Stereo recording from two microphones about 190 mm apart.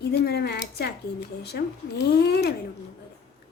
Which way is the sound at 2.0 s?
60° left (ahead or behind).